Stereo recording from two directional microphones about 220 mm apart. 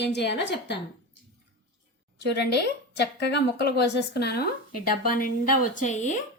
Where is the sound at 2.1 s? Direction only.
50° left (ahead or behind).